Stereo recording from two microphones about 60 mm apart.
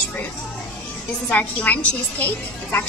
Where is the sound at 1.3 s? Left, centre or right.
Left.